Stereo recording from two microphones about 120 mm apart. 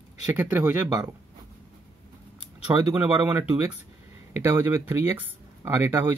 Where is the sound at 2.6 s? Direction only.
15° right (ahead or behind).